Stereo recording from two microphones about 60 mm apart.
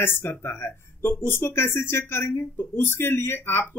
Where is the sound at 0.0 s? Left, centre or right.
Left.